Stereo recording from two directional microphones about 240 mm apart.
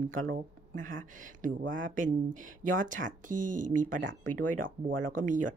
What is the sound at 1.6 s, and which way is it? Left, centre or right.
Speech, right.